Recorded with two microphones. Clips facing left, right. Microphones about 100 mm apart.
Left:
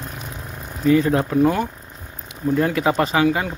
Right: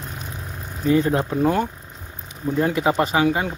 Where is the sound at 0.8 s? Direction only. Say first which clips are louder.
Left 2 dB; 30° right (ahead or behind).